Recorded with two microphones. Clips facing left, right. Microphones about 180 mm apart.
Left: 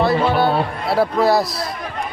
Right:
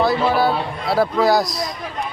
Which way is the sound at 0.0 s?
Centre (ahead or behind).